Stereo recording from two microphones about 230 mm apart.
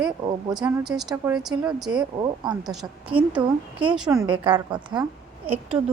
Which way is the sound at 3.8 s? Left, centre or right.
Centre.